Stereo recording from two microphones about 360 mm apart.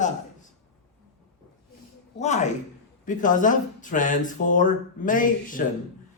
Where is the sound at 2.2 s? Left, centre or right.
Centre.